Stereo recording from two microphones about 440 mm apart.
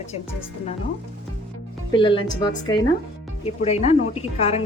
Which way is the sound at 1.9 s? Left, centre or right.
Centre.